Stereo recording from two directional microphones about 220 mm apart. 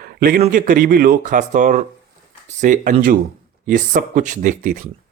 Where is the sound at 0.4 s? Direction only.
35° right (ahead or behind).